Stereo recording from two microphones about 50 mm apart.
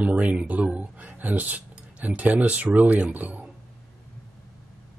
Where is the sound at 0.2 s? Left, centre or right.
Right.